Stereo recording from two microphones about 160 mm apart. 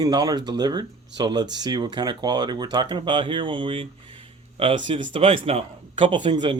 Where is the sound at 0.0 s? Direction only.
25° right (ahead or behind).